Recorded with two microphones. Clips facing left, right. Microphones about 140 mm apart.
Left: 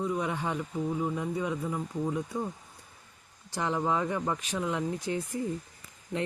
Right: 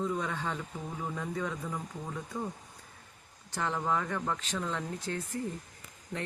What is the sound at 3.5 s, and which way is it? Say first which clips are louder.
Speech: left 3 dB; 15° left (ahead or behind).